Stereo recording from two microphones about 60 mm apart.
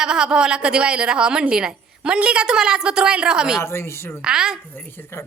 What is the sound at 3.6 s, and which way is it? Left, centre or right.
Speech, left.